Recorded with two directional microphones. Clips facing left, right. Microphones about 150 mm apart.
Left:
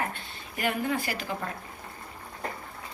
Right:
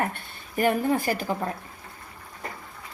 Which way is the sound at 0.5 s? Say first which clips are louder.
Right 6 dB; 45° right (ahead or behind).